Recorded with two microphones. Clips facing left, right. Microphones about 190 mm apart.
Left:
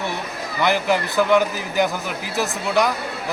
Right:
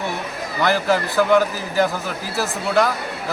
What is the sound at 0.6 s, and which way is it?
Speech, 15° left (ahead or behind).